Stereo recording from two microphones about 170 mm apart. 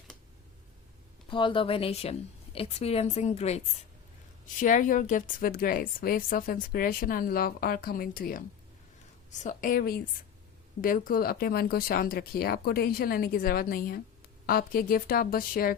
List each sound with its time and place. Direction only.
1.3 s a woman's voice: 30° left (ahead or behind)
4.6 s a woman's voice: 50° left (ahead or behind)